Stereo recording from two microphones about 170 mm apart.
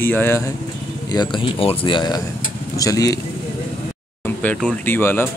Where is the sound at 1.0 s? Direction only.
25° left (ahead or behind).